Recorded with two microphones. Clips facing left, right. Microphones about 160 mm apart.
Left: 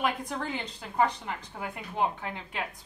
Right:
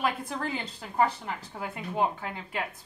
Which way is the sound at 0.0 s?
5° right (ahead or behind).